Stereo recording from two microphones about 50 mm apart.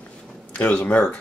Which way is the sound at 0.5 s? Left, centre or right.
Left.